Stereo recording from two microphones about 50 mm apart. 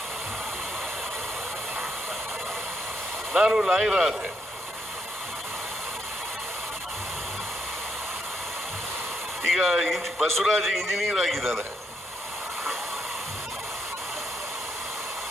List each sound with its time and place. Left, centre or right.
3.3 s speech: centre
9.5 s a man's voice: centre